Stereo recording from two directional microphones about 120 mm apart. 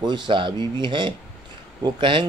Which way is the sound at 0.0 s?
40° right (ahead or behind).